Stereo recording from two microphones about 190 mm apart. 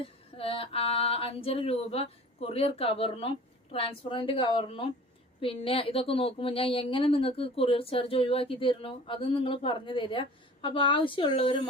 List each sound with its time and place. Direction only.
0.0 s female singing: 30° left (ahead or behind)
5.4 s a woman's voice: 30° left (ahead or behind)